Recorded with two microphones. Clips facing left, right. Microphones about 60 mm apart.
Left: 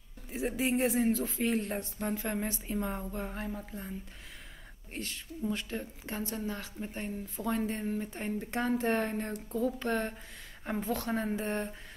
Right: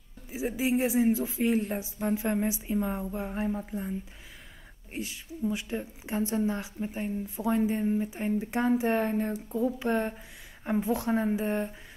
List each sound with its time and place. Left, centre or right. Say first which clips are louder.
0.3 s speech: right 3 dB; centre
4.9 s a woman's voice: right 3 dB; centre; by 6.6 s right
6.6 s speech: right 5 dB; centre